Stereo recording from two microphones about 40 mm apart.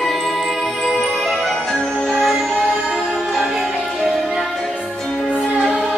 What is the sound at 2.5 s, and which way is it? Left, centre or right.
Music, right.